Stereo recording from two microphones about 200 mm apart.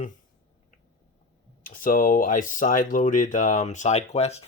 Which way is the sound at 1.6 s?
45° left (ahead or behind).